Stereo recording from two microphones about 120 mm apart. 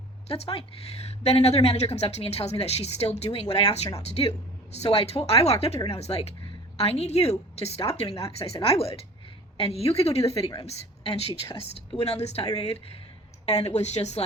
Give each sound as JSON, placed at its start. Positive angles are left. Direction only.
{"t": 0.3, "sound": "a woman's voice", "side_deg": 55}